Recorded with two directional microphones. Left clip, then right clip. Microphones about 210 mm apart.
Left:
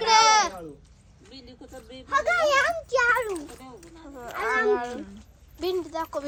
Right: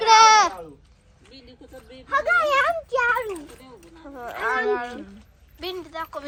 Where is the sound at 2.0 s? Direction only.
25° right (ahead or behind).